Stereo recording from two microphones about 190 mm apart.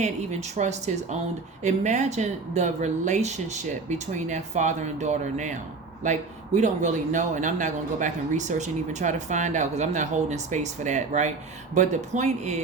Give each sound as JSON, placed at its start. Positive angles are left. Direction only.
{"t": 0.0, "sound": "speech", "side_deg": -35}